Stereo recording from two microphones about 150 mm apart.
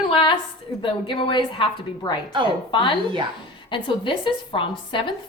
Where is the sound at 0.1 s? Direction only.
35° left (ahead or behind).